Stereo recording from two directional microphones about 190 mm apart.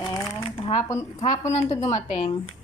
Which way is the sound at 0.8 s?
15° left (ahead or behind).